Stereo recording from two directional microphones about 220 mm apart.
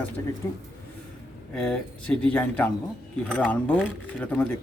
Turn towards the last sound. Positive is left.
turn(degrees=5)  # may be behind; listen again after turning